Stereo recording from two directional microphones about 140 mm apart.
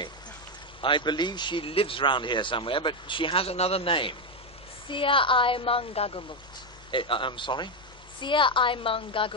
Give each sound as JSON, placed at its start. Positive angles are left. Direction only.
{"t": 0.7, "sound": "speech", "side_deg": 35}